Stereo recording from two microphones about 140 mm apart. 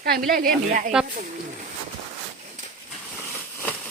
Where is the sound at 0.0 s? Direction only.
90° right; by 0.9 s 75° right (ahead or behind).